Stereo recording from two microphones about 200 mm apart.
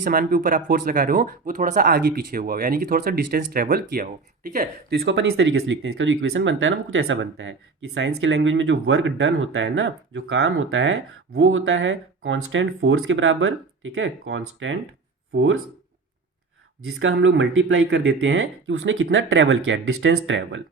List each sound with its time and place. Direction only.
0.0 s speech: 45° right (ahead or behind); by 15.5 s 70° right (ahead or behind)
17.0 s speech: 70° right (ahead or behind)